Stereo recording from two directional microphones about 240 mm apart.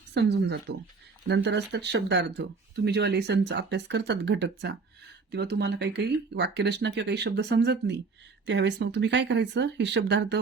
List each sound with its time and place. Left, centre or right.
0.1 s speech: right